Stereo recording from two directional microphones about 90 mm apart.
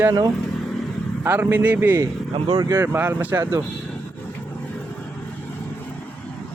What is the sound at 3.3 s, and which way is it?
Speech, 35° right (ahead or behind).